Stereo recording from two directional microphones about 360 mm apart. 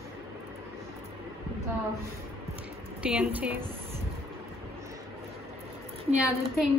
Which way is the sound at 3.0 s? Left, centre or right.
Centre.